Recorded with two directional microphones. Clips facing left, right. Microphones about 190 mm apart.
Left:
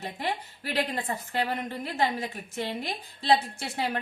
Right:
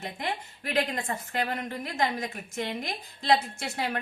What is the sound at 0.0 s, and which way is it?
A woman's voice, 35° left (ahead or behind).